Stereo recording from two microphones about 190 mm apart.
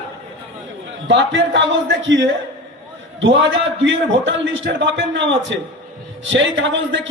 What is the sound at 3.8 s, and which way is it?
A man's voice, 70° right (ahead or behind).